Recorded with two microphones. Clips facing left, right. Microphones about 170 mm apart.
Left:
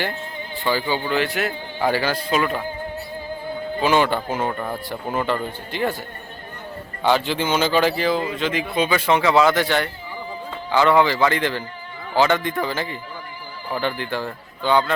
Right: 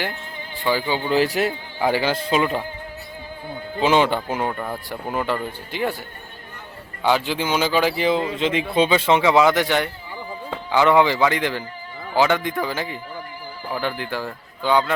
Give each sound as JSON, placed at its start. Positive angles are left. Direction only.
{"t": 0.6, "sound": "speech", "side_deg": -15}
{"t": 1.1, "sound": "a man's voice", "side_deg": -35}
{"t": 1.8, "sound": "speech", "side_deg": -15}
{"t": 3.8, "sound": "speech", "side_deg": -20}
{"t": 7.0, "sound": "speech", "side_deg": -10}